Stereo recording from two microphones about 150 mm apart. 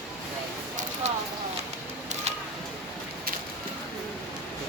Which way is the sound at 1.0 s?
50° right (ahead or behind).